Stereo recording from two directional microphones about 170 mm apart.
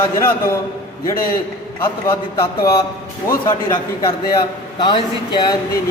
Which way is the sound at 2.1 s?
15° left (ahead or behind).